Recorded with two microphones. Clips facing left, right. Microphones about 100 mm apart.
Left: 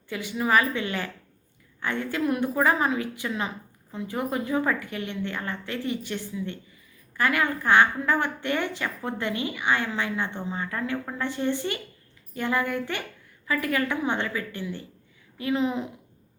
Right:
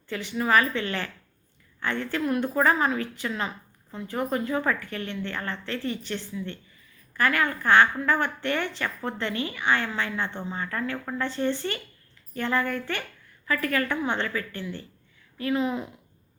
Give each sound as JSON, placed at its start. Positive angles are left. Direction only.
{"t": 0.1, "sound": "a woman's voice", "side_deg": 15}